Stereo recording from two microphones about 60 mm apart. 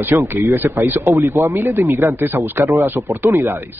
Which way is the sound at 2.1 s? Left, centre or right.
Right.